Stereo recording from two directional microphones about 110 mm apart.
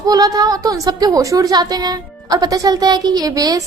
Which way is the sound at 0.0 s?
35° right (ahead or behind).